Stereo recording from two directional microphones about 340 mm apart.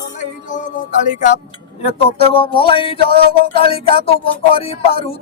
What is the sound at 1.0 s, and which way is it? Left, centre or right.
Speech, left.